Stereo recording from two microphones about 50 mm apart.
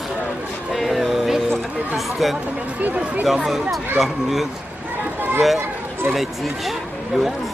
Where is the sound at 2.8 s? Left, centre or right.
Right.